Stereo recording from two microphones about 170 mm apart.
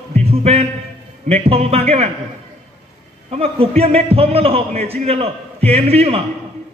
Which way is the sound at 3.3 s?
35° right (ahead or behind).